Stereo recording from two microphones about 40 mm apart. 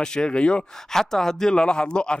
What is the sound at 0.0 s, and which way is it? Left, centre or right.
Speech, centre.